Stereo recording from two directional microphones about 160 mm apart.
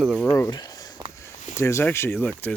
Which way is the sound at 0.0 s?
Centre (ahead or behind).